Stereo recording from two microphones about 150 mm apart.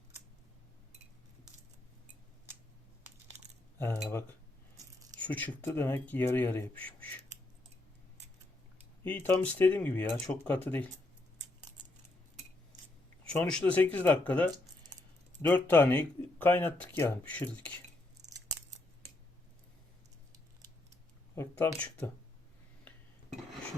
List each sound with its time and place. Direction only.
3.8 s speech: 15° left (ahead or behind)
9.0 s speech: 15° left (ahead or behind)
13.2 s speech: 10° left (ahead or behind)
21.3 s speech: 15° left (ahead or behind)